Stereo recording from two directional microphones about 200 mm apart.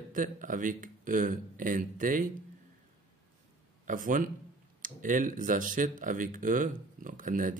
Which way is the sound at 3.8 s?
40° right (ahead or behind).